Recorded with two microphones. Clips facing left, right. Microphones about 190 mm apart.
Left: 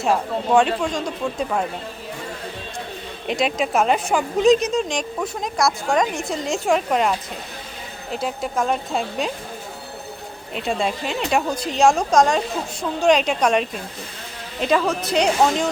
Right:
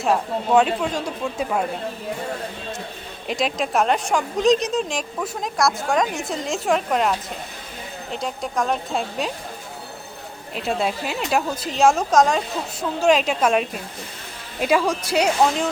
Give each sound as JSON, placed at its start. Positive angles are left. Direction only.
{"t": 0.0, "sound": "speech", "side_deg": 0}
{"t": 3.2, "sound": "speech", "side_deg": 0}
{"t": 10.5, "sound": "a woman's voice", "side_deg": 0}